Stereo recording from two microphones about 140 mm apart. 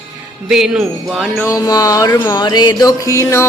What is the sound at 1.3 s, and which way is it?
Music, 20° left (ahead or behind).